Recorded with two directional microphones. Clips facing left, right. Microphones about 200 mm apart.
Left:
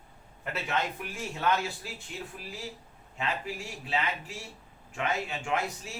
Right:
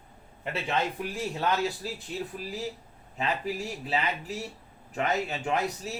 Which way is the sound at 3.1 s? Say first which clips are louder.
Right 4 dB; 40° right (ahead or behind).